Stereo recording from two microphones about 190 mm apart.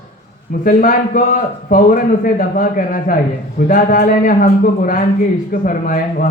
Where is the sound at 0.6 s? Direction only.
45° left (ahead or behind).